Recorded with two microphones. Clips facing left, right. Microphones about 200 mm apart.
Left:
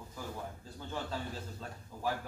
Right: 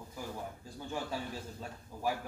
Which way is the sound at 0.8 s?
10° right (ahead or behind).